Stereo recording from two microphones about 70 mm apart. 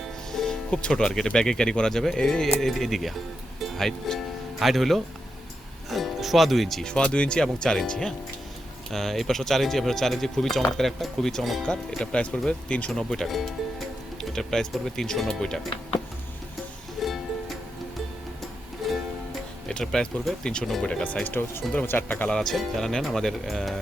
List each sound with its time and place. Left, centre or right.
0.3 s speech: centre
6.9 s speech: centre
13.0 s speech: centre
17.0 s music: centre
18.8 s music: centre
19.6 s speech: centre; by 22.3 s left
22.3 s speech: centre